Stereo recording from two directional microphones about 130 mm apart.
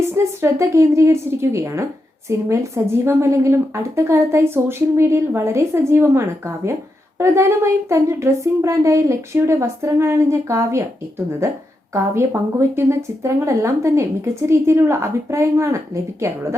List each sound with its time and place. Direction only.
0.1 s speech: 20° right (ahead or behind)